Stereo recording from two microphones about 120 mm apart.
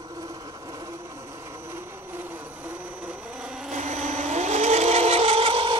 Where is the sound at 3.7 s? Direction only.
75° right (ahead or behind).